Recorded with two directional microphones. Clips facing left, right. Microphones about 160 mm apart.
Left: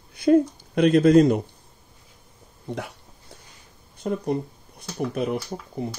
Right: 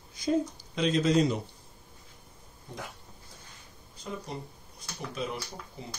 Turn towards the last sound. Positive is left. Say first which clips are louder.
# left 11 dB
turn(degrees=55)  # may be behind; listen again after turning